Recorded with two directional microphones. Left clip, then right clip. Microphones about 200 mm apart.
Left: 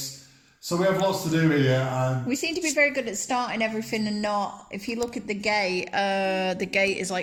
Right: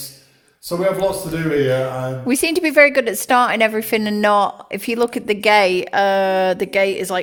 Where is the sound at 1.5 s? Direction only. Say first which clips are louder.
Right 9 dB; 10° right (ahead or behind).